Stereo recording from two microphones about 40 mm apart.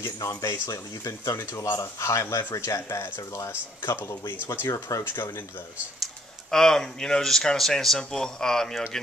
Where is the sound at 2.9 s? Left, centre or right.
Left.